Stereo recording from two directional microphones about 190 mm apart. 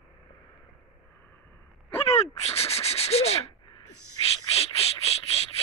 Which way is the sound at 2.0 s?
35° left (ahead or behind).